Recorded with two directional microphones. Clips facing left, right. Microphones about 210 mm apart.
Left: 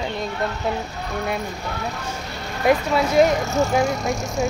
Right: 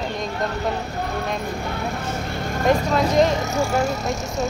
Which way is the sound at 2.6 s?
10° left (ahead or behind).